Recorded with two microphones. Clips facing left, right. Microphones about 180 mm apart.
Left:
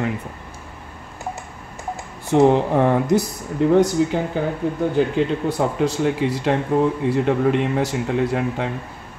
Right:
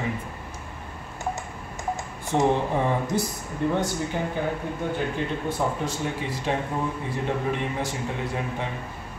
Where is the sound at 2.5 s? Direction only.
75° left (ahead or behind).